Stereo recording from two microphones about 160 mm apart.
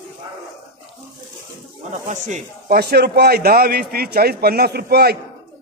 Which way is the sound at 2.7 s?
85° right.